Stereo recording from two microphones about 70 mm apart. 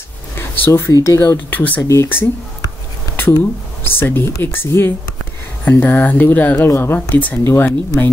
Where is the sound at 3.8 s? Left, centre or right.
Left.